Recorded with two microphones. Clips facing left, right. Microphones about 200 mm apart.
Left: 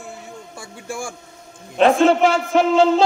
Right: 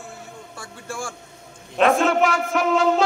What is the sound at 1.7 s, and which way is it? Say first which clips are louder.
A man's voice: left 4 dB; 30° left (ahead or behind).